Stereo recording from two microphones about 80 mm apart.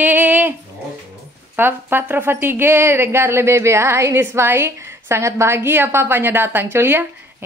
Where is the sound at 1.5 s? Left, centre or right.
Right.